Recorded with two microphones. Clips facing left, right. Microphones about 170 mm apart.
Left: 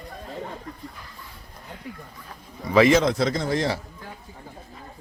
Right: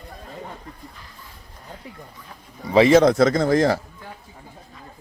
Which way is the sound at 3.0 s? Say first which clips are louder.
Right 7 dB; 45° right (ahead or behind).